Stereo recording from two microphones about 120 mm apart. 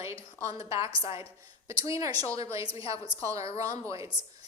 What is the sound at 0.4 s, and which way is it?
Speech, 25° right (ahead or behind).